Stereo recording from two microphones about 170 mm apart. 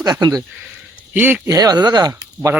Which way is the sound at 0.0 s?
25° right (ahead or behind).